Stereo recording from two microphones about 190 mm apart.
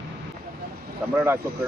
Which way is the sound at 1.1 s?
10° right (ahead or behind).